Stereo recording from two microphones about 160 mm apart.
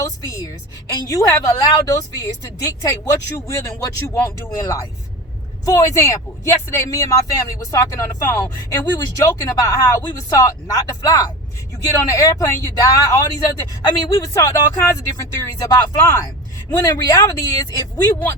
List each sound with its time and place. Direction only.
0.0 s speech: 20° left (ahead or behind)
5.6 s speech: 20° left (ahead or behind)